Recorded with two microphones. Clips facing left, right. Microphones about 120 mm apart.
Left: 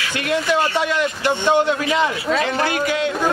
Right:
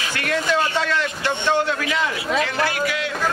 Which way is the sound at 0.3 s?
15° left (ahead or behind).